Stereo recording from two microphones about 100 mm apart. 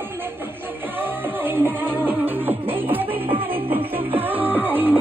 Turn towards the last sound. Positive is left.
turn(degrees=-20)  # may be behind; listen again after turning